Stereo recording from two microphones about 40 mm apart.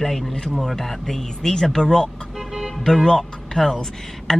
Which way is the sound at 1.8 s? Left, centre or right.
Left.